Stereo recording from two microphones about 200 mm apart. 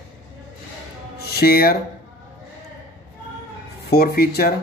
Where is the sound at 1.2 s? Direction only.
50° left (ahead or behind).